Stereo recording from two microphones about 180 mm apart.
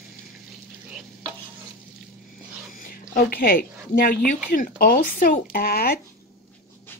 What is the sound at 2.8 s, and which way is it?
A woman's voice, 50° left (ahead or behind).